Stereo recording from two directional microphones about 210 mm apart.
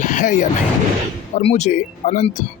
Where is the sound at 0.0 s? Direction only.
35° left (ahead or behind).